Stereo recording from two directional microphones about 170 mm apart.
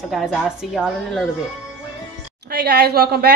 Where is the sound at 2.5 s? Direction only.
70° right (ahead or behind).